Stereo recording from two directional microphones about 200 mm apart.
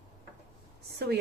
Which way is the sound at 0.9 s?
55° right (ahead or behind).